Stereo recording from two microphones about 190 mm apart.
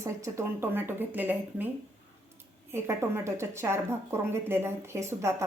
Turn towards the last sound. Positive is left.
turn(degrees=-15)  # may be behind; listen again after turning